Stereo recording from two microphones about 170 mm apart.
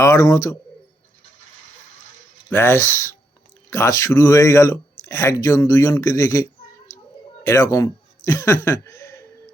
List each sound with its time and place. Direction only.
0.0 s speech: 15° left (ahead or behind)
2.5 s speech: 15° left (ahead or behind)